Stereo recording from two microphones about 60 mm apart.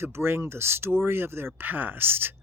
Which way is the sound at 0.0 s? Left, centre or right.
Right.